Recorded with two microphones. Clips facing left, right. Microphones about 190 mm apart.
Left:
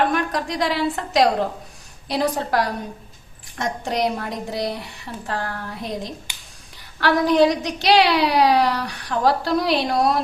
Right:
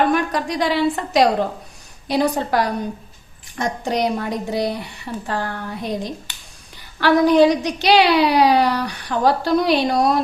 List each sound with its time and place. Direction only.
0.1 s a woman's voice: centre (ahead or behind)